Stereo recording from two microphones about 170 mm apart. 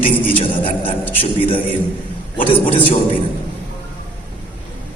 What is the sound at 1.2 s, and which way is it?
Speech, 30° left (ahead or behind).